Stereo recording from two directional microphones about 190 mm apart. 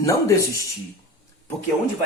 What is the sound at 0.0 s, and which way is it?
Speech, 15° left (ahead or behind).